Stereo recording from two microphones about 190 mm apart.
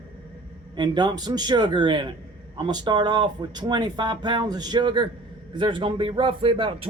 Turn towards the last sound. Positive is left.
turn(degrees=-25)  # may be behind; listen again after turning